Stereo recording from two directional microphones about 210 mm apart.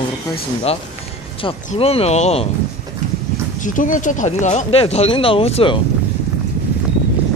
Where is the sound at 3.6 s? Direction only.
40° left (ahead or behind).